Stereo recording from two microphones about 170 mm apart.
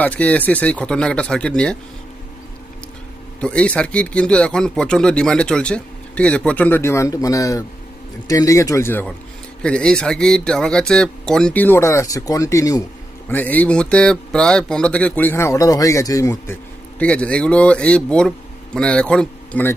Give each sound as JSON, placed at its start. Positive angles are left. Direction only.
{"t": 0.0, "sound": "speech", "side_deg": 10}
{"t": 3.4, "sound": "speech", "side_deg": 5}